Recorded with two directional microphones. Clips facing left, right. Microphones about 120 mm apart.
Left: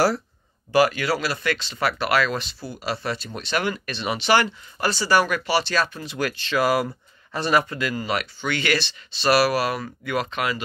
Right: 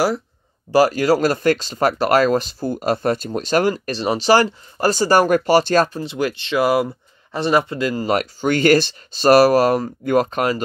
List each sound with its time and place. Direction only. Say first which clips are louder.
0.7 s speech: right 5 dB; 35° right (ahead or behind)
5.9 s speech: right 5 dB; 25° right (ahead or behind); by 10.6 s 40° right (ahead or behind)